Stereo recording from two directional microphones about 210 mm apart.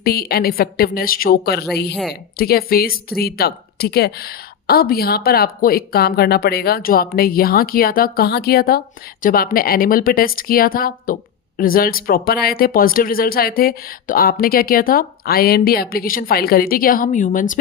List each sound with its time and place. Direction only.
0.0 s a woman's voice: 45° left (ahead or behind)
1.9 s speech: centre (ahead or behind)
2.4 s a woman's voice: 45° left (ahead or behind)